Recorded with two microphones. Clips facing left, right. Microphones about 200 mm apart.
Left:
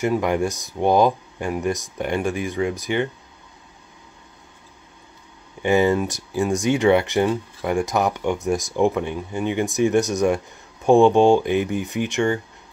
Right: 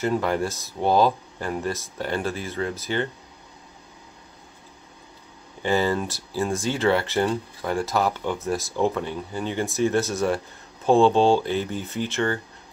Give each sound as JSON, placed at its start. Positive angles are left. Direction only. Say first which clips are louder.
{"t": 0.0, "sound": "speech", "louder": "left 3 dB", "side_deg": 15}
{"t": 5.6, "sound": "speech", "louder": "left 5 dB", "side_deg": 20}